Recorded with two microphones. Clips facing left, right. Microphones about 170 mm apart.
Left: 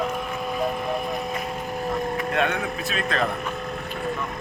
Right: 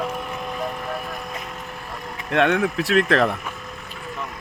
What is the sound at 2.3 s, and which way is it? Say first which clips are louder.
Speech: right 9 dB; 75° right (ahead or behind).